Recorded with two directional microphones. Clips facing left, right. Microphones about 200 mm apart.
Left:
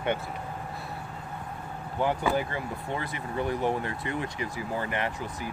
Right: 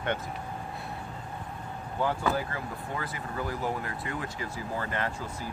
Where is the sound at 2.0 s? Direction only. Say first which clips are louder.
Left 2 dB; 20° left (ahead or behind).